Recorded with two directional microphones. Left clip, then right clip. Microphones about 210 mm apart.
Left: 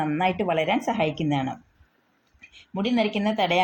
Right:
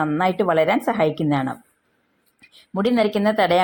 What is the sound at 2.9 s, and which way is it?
Speech, 25° right (ahead or behind).